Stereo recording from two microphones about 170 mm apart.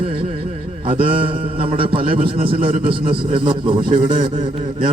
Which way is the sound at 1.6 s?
30° right (ahead or behind).